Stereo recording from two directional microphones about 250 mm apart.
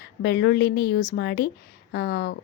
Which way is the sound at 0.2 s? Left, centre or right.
Left.